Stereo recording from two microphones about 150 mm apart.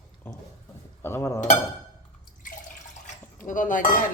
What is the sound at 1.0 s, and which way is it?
Chink, 15° left (ahead or behind).